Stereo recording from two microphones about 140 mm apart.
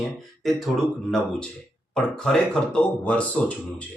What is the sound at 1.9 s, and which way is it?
Speech, 5° left (ahead or behind).